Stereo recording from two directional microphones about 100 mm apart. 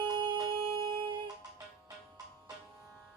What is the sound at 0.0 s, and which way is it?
Music, 50° right (ahead or behind).